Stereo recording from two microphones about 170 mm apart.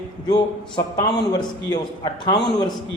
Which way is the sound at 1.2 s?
25° left (ahead or behind).